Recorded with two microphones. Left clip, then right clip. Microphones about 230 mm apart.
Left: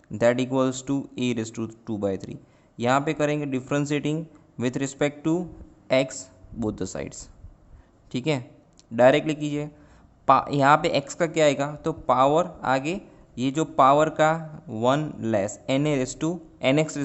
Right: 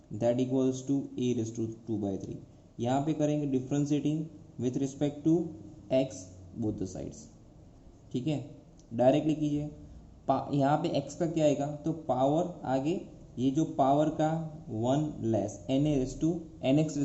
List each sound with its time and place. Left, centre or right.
0.2 s a man's voice: left